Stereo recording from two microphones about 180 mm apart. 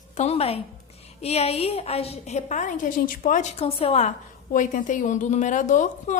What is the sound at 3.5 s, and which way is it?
A woman's voice, 35° left (ahead or behind).